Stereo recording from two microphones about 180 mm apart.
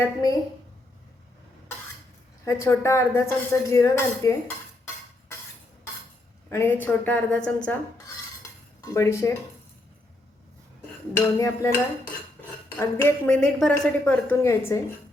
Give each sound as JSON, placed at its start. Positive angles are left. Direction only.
{"t": 0.0, "sound": "a woman's voice", "side_deg": 20}
{"t": 2.4, "sound": "speech", "side_deg": 15}
{"t": 6.5, "sound": "speech", "side_deg": 10}
{"t": 8.8, "sound": "speech", "side_deg": 15}
{"t": 11.3, "sound": "speech", "side_deg": 15}
{"t": 12.7, "sound": "speech", "side_deg": 15}